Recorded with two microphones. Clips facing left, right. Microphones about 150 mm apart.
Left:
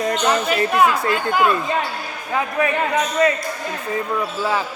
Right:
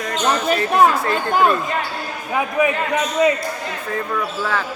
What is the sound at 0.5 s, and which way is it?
Speech, 40° right (ahead or behind).